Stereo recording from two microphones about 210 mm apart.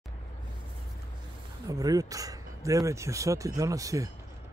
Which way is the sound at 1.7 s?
15° right (ahead or behind).